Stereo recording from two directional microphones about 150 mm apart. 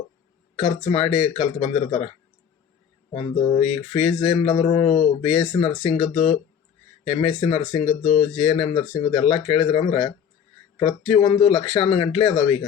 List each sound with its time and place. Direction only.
0.5 s speech: 40° left (ahead or behind)
3.2 s speech: 45° left (ahead or behind)